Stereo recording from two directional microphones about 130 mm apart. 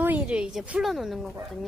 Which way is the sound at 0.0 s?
10° right (ahead or behind).